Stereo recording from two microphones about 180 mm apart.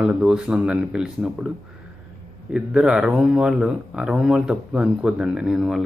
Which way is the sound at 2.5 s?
5° right (ahead or behind).